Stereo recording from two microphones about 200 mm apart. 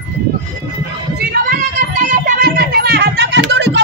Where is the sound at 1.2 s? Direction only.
50° right (ahead or behind).